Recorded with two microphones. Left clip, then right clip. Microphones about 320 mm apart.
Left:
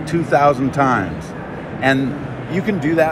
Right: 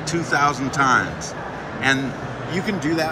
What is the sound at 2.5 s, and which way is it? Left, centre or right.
Speech, centre.